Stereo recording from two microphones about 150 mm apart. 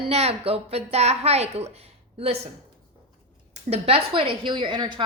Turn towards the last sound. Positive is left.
turn(degrees=-35)  # may be behind; listen again after turning